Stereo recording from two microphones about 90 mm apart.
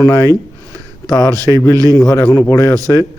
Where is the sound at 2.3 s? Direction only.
40° left (ahead or behind).